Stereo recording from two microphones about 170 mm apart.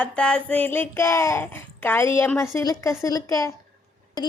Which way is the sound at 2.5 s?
20° left (ahead or behind).